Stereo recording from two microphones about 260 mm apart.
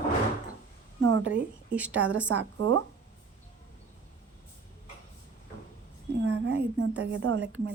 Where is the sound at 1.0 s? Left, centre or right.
Right.